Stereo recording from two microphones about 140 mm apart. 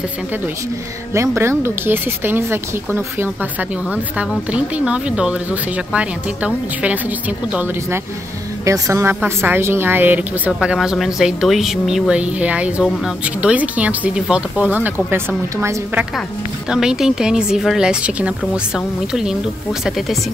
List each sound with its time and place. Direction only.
1.1 s a woman's voice: 20° right (ahead or behind)
8.6 s a woman's voice: 20° right (ahead or behind)
16.6 s speech: 5° right (ahead or behind)